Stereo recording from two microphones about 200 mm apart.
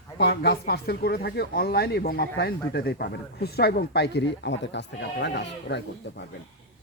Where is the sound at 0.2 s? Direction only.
55° left (ahead or behind).